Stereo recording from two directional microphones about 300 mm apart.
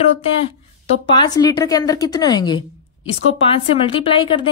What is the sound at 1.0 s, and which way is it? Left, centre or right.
A woman's voice, centre.